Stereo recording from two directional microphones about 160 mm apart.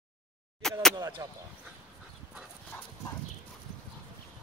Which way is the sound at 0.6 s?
5° left (ahead or behind).